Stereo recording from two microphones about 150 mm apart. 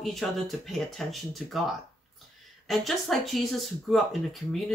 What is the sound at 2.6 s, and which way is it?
Speech, centre (ahead or behind).